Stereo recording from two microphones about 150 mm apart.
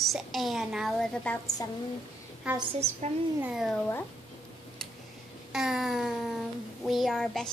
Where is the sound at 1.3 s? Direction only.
10° left (ahead or behind).